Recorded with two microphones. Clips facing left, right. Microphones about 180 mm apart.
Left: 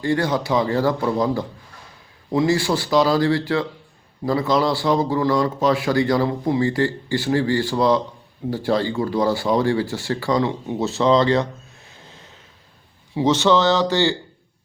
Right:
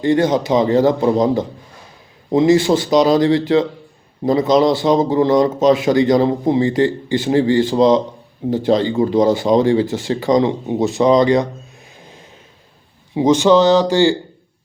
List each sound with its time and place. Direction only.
0.0 s speech: 20° right (ahead or behind)
11.9 s music: 15° right (ahead or behind)
13.1 s speech: 15° right (ahead or behind)